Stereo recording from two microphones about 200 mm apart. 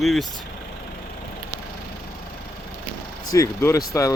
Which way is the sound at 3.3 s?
15° left (ahead or behind).